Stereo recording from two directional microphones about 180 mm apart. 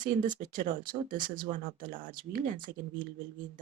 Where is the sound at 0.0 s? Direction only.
45° right (ahead or behind).